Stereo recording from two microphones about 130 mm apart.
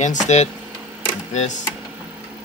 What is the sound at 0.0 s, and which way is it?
Speech, 65° left (ahead or behind).